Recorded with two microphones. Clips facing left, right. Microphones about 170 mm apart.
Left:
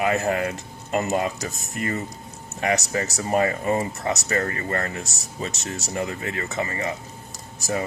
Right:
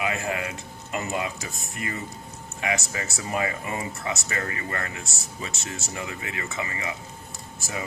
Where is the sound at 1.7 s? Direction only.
40° left (ahead or behind).